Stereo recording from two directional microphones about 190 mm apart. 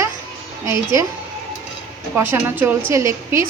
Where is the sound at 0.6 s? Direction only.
15° right (ahead or behind).